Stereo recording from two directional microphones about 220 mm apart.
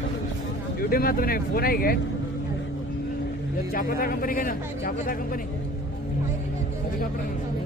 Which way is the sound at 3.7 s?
40° left (ahead or behind).